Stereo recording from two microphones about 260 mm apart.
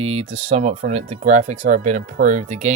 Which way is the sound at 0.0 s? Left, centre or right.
Right.